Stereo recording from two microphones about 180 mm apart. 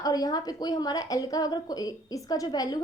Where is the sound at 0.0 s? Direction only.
20° left (ahead or behind).